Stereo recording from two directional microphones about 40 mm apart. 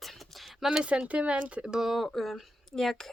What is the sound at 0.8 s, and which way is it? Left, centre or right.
Speech, right.